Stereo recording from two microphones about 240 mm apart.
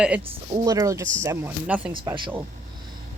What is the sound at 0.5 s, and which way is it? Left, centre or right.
Speech, centre.